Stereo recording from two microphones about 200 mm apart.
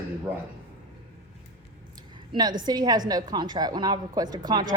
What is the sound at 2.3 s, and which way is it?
A woman's voice, 20° right (ahead or behind).